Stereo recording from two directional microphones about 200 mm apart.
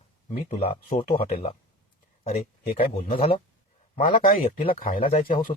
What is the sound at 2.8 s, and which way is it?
Speech, 30° left (ahead or behind).